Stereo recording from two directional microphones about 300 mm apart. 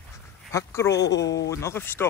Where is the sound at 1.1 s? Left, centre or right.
Left.